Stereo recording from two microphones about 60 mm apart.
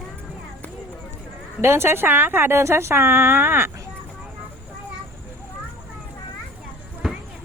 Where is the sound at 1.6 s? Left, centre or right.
Right.